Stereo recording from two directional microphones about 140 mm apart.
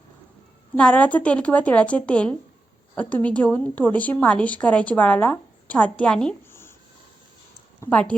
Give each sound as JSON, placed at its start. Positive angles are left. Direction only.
{"t": 0.8, "sound": "a woman's voice", "side_deg": 10}
{"t": 6.5, "sound": "writing", "side_deg": 15}
{"t": 7.8, "sound": "speech", "side_deg": 10}